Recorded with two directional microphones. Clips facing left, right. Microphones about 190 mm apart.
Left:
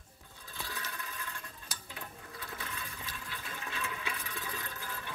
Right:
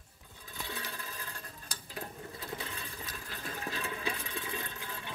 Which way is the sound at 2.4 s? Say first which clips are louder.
Right 2 dB; 30° right (ahead or behind).